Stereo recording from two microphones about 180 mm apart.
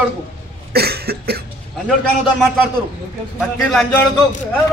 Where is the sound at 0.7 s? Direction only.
60° right (ahead or behind).